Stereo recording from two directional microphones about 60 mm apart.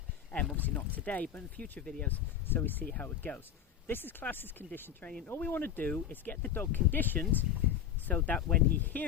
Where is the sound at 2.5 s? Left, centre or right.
Left.